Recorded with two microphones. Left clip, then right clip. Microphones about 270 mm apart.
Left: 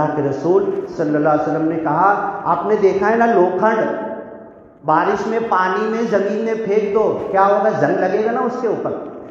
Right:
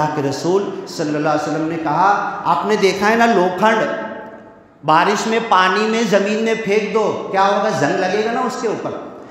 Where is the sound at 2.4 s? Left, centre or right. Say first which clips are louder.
Even; right.